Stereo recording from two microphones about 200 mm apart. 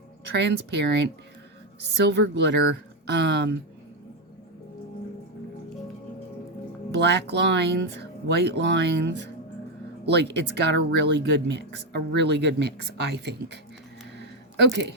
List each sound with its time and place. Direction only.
0.3 s speech: 60° right (ahead or behind)
6.9 s speech: 60° right (ahead or behind)
14.2 s a sound: 60° right (ahead or behind)